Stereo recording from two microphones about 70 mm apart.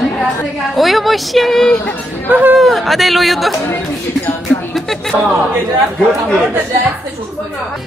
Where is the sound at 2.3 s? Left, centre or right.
Right.